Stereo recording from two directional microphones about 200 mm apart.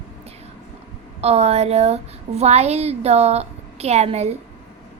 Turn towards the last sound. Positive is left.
turn(degrees=-30)  # may be behind; listen again after turning